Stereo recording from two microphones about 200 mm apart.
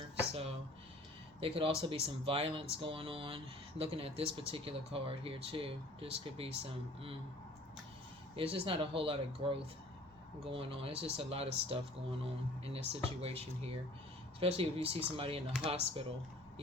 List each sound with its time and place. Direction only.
1.4 s speech: 25° right (ahead or behind)
8.4 s speech: 25° right (ahead or behind)